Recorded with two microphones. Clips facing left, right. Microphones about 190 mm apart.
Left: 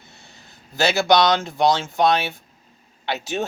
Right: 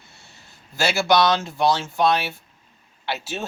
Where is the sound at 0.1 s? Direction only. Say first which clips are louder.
Left 3 dB; 20° left (ahead or behind).